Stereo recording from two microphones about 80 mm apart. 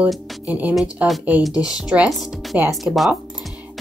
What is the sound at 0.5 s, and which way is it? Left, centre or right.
Speech, centre.